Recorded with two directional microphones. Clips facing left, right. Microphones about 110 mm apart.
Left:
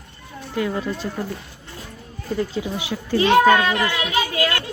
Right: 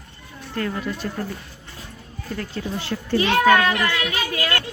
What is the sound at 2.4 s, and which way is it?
Speech, 10° left (ahead or behind).